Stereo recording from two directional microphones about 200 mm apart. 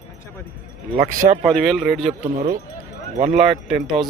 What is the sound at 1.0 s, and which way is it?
Speech, 40° right (ahead or behind).